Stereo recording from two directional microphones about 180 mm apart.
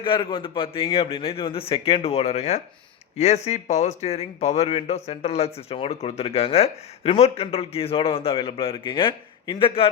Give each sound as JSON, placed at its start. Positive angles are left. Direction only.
{"t": 0.0, "sound": "speech", "side_deg": 25}